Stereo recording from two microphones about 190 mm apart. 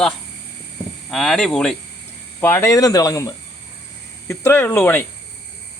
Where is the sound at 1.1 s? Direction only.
Centre (ahead or behind).